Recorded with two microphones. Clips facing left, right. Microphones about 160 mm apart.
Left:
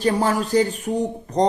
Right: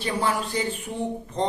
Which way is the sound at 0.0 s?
40° left (ahead or behind).